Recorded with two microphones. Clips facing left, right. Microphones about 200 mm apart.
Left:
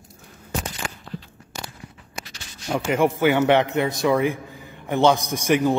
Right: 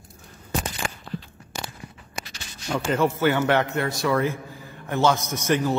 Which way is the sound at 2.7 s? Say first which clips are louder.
Left 2 dB; 15° left (ahead or behind).